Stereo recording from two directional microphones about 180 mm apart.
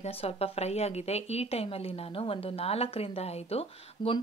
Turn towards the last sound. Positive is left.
turn(degrees=35)  # may be behind; listen again after turning